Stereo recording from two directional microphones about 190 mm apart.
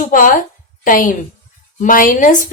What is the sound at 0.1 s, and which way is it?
A woman's voice, 45° left (ahead or behind).